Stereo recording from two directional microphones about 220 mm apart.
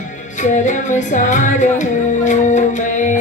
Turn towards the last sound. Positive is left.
turn(degrees=35)  # may be behind; listen again after turning